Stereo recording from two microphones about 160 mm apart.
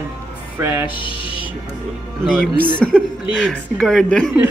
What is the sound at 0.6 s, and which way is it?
Speech, 15° right (ahead or behind).